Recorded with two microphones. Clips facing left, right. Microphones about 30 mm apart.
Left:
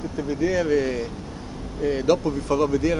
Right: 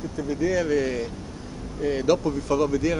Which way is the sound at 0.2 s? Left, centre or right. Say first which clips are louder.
Left 1 dB; centre.